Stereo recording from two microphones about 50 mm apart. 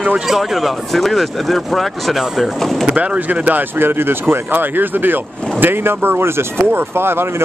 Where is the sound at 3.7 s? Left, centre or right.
Right.